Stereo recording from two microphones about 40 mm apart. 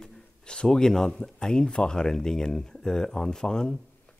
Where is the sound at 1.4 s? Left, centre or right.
Centre.